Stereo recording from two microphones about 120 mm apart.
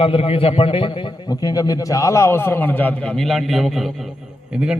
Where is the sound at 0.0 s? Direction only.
50° left (ahead or behind).